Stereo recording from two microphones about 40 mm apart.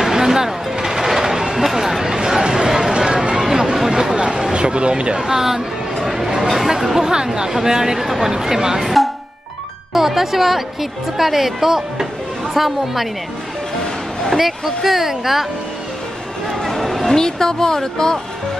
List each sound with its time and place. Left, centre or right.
0.0 s a sound: centre
2.1 s chatter: centre
3.7 s a sound: centre
6.0 s speech: centre
9.9 s speech: centre
14.3 s speech: centre
16.5 s speech: centre